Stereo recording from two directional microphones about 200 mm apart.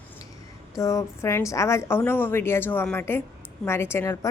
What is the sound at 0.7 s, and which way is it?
A woman's voice, 15° left (ahead or behind).